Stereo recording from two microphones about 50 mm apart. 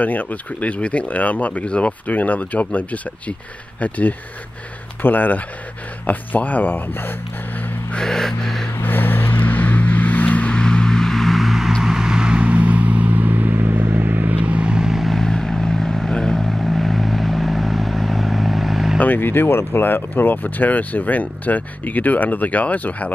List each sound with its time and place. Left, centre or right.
0.0 s speech: left
7.9 s music: centre
8.8 s vehicle: left
10.5 s vehicle: centre
15.2 s vehicle: centre
18.9 s speech: left